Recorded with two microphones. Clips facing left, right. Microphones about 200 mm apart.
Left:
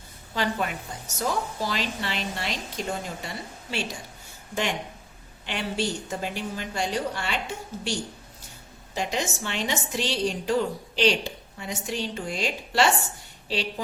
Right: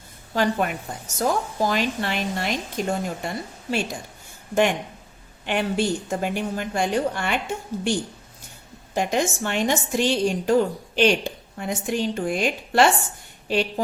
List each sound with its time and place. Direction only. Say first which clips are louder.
0.3 s a woman's voice: right 5 dB; 50° right (ahead or behind)
5.5 s a woman's voice: right 6 dB; 50° right (ahead or behind)
9.0 s a woman's voice: right 6 dB; 50° right (ahead or behind)